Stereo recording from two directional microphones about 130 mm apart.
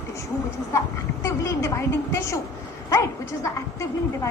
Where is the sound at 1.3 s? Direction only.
20° left (ahead or behind).